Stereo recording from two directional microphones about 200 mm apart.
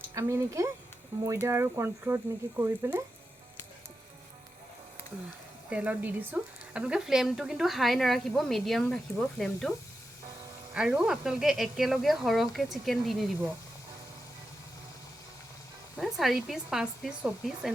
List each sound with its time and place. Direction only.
0.1 s speech: 15° right (ahead or behind)
5.7 s a woman's voice: 5° right (ahead or behind)
10.8 s a woman's voice: 5° right (ahead or behind)
16.0 s a woman's voice: centre (ahead or behind)